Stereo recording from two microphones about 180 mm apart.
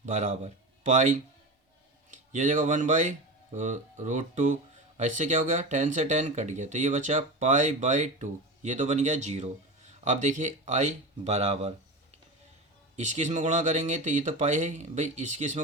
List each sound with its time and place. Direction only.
0.0 s speech: 45° right (ahead or behind)
13.0 s speech: 40° right (ahead or behind)